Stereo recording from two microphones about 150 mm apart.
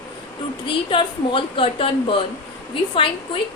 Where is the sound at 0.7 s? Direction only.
35° left (ahead or behind).